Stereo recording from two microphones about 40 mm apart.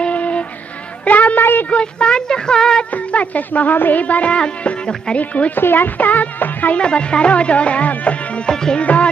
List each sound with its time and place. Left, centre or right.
0.0 s music: left
1.0 s a sound: left
1.4 s a sound: left
1.7 s speech: left
2.2 s a sound: centre
2.9 s music: left
4.0 s music: left
5.6 s speech: left
5.9 s music: left
6.8 s music: left